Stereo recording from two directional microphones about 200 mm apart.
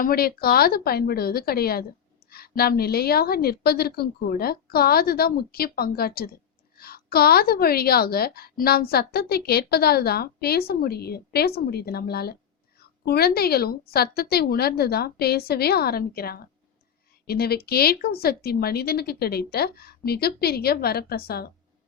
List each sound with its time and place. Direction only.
0.0 s a woman's voice: 50° left (ahead or behind)